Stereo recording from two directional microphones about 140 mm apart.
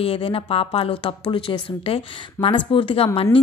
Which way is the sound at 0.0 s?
40° left (ahead or behind).